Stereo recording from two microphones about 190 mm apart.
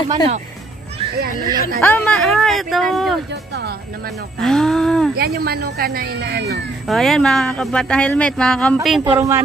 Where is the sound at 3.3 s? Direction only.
60° right (ahead or behind).